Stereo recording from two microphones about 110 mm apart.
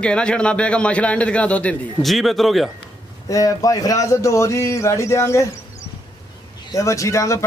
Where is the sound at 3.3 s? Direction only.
30° left (ahead or behind).